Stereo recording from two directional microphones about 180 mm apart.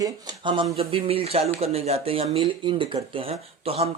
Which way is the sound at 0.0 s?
25° right (ahead or behind).